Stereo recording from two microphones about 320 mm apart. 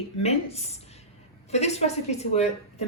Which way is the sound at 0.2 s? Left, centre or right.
Centre.